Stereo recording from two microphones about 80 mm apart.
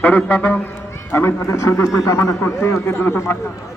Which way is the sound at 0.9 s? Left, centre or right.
Left.